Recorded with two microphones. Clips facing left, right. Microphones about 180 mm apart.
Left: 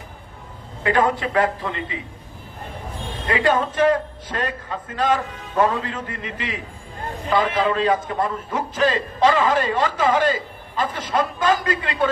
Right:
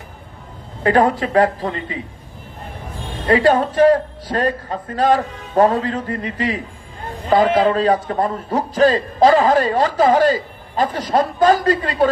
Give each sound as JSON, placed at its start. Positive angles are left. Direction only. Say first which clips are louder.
{"t": 0.8, "sound": "a man's voice", "louder": "right 4 dB", "side_deg": -35}
{"t": 3.2, "sound": "a man's voice", "louder": "right 6 dB", "side_deg": -35}